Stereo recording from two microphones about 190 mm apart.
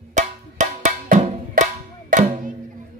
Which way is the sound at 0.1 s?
40° right (ahead or behind).